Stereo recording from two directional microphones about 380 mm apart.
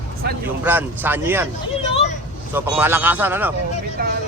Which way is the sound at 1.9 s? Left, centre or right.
Centre.